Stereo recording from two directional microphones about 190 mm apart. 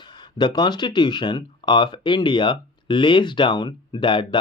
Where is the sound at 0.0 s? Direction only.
25° left (ahead or behind).